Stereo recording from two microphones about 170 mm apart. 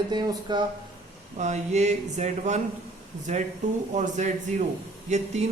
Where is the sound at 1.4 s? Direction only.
45° right (ahead or behind).